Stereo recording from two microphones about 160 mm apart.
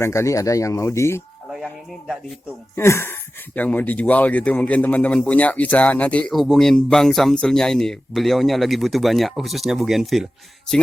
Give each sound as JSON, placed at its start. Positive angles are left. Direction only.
{"t": 0.0, "sound": "speech", "side_deg": 15}
{"t": 1.5, "sound": "a sound", "side_deg": -5}
{"t": 2.7, "sound": "speech", "side_deg": 15}